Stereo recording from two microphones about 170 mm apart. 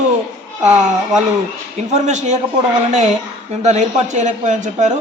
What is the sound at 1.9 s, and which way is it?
A man's voice, 45° right (ahead or behind).